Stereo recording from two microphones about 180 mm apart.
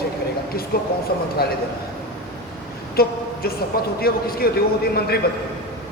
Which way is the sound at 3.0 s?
55° left (ahead or behind).